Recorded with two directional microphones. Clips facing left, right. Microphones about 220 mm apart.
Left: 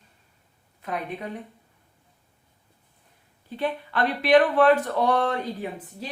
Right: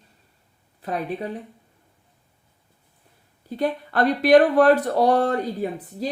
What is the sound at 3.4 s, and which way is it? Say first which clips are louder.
Speech: right 4 dB; 40° right (ahead or behind).